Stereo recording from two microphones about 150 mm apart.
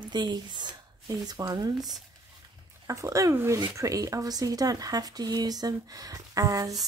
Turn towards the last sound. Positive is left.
turn(degrees=-25)  # may be behind; listen again after turning